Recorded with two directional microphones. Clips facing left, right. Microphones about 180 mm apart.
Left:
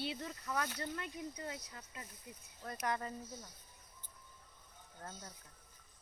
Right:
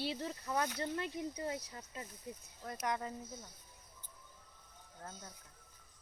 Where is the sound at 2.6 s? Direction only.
15° right (ahead or behind).